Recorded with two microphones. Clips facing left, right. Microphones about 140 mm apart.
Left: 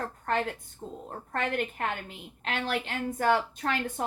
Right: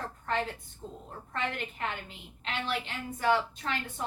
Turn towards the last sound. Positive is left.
turn(degrees=50)  # may be behind; listen again after turning